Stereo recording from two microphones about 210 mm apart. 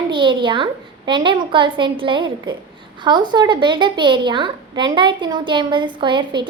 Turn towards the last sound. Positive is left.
turn(degrees=-20)  # may be behind; listen again after turning